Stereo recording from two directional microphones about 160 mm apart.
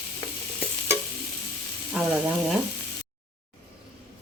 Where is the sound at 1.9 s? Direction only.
5° right (ahead or behind).